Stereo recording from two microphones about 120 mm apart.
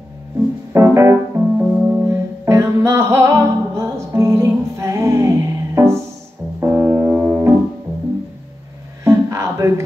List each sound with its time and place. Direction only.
0.7 s music: 25° right (ahead or behind)
1.6 s music: 10° right (ahead or behind)
9.0 s a sound: 25° right (ahead or behind)